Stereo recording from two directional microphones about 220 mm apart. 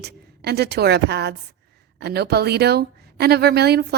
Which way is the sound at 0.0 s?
50° right (ahead or behind).